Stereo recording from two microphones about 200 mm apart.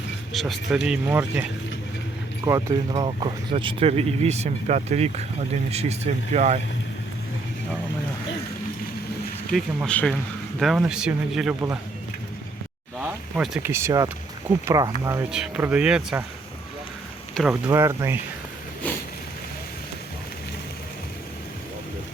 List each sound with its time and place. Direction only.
0.3 s speech: centre (ahead or behind); by 6.6 s 35° right (ahead or behind)
9.5 s speech: 5° left (ahead or behind)
13.0 s speech: 5° right (ahead or behind)
17.5 s speech: 15° right (ahead or behind)
18.8 s a sound: 10° left (ahead or behind)